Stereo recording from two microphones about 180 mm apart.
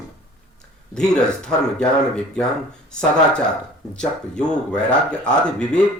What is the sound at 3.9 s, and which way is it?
Speech, 5° left (ahead or behind).